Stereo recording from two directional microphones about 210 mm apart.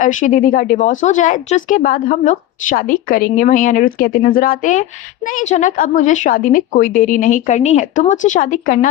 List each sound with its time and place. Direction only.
0.0 s speech: 40° left (ahead or behind)